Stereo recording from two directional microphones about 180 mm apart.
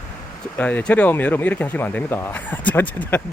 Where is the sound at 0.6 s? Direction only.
10° left (ahead or behind).